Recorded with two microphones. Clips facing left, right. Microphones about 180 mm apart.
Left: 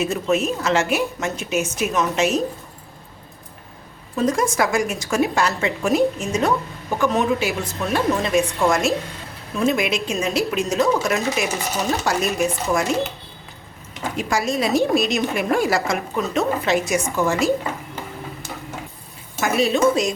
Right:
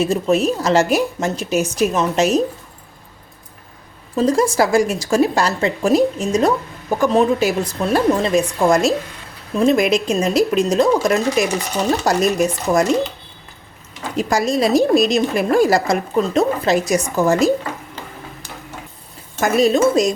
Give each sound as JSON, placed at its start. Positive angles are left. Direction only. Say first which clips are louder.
{"t": 0.0, "sound": "a woman's voice", "louder": "right 4 dB", "side_deg": -35}
{"t": 4.1, "sound": "a woman's voice", "louder": "right 4 dB", "side_deg": -35}
{"t": 14.2, "sound": "a woman's voice", "louder": "right 5 dB", "side_deg": -35}
{"t": 19.4, "sound": "a woman's voice", "louder": "right 4 dB", "side_deg": -40}